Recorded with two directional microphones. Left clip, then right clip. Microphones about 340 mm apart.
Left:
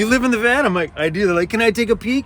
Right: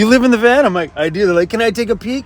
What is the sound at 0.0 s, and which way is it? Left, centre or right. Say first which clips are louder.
Speech: right 6 dB; centre.